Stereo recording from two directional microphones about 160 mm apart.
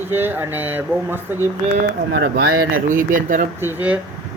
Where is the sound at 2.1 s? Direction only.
85° right.